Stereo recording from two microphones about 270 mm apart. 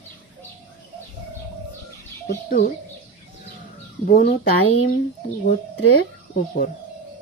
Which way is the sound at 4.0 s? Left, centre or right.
Left.